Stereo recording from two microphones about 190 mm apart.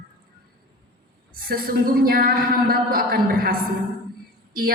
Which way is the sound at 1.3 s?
50° right (ahead or behind).